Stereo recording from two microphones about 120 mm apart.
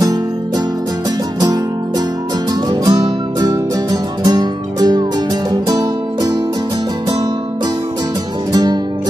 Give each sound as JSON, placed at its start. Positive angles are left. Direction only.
{"t": 2.7, "sound": "music", "side_deg": -35}